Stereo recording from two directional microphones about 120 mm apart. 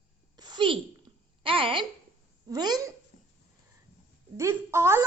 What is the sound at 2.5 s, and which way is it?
Speech, 35° right (ahead or behind).